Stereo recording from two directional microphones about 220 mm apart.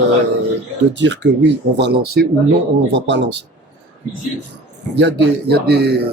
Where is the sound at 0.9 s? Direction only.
55° right (ahead or behind).